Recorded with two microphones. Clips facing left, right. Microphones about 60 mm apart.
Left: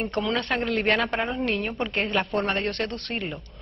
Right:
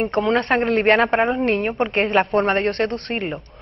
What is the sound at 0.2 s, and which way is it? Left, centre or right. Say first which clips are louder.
Speech: right 7 dB; right.